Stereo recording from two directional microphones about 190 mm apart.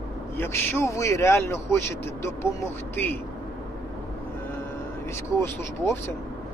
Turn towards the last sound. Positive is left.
turn(degrees=10)  # may be behind; listen again after turning